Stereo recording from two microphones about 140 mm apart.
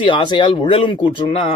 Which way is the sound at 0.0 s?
35° left (ahead or behind).